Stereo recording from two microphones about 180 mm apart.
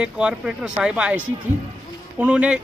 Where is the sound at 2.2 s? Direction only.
5° right (ahead or behind).